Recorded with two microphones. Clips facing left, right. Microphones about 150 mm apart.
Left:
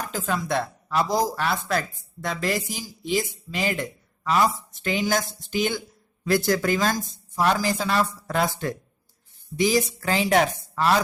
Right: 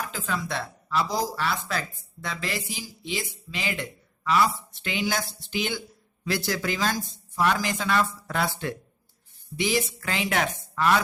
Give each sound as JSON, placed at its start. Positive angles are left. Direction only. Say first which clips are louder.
{"t": 0.0, "sound": "speech", "louder": "left 3 dB", "side_deg": 45}